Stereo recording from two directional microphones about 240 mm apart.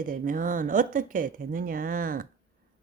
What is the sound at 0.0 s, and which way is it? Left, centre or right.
Speech, right.